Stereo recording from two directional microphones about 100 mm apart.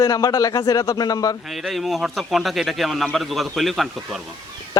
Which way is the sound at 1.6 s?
Centre (ahead or behind).